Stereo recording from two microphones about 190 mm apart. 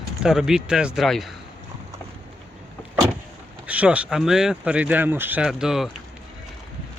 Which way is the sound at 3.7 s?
5° right (ahead or behind).